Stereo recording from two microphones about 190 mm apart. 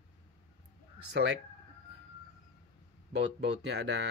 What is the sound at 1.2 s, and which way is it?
Speech, 65° right (ahead or behind).